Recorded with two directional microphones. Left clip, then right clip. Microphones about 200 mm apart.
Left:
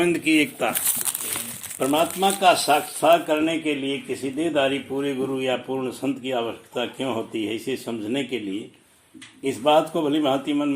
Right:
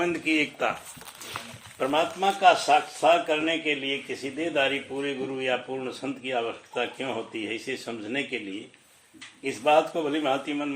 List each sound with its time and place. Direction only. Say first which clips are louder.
0.0 s speech: left 5 dB; 35° left (ahead or behind)
1.8 s speech: left 4 dB; 40° left (ahead or behind)
9.4 s speech: left 3 dB; 35° left (ahead or behind)